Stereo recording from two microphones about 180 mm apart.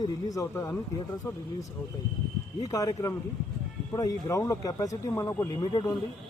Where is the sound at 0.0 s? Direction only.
20° left (ahead or behind).